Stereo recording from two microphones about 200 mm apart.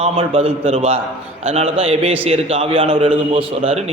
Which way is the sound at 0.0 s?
30° right (ahead or behind).